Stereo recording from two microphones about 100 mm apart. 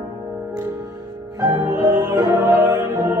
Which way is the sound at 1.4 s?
40° right (ahead or behind).